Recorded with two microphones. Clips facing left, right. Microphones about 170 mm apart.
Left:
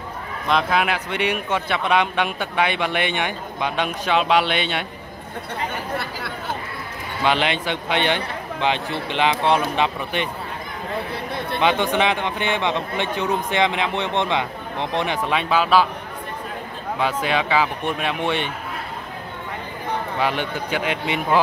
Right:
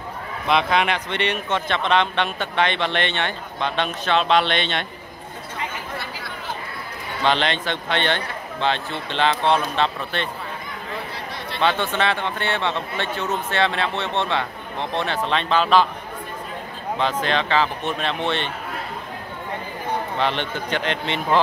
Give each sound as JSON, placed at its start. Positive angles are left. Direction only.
{"t": 0.5, "sound": "a man's voice", "side_deg": 0}
{"t": 7.2, "sound": "a man's voice", "side_deg": 10}
{"t": 11.6, "sound": "a man's voice", "side_deg": 15}
{"t": 17.0, "sound": "a man's voice", "side_deg": 10}
{"t": 20.2, "sound": "a man's voice", "side_deg": 10}